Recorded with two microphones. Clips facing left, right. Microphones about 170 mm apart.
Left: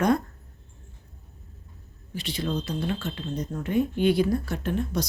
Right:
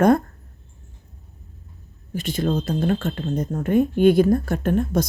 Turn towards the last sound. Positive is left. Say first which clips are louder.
# right 7 dB
turn(degrees=-50)  # may be behind; listen again after turning